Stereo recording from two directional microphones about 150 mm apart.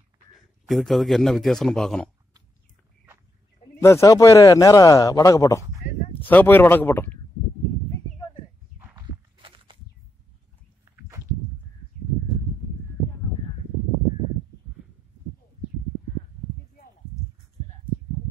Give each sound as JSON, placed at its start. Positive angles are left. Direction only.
{"t": 0.7, "sound": "speech", "side_deg": 0}
{"t": 3.8, "sound": "speech", "side_deg": 20}
{"t": 8.9, "sound": "walk", "side_deg": -35}
{"t": 10.9, "sound": "a sound", "side_deg": -20}